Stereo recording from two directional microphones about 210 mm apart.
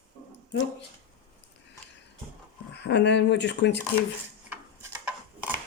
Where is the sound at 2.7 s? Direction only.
55° left (ahead or behind).